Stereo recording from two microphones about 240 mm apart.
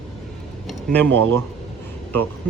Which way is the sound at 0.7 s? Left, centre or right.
Centre.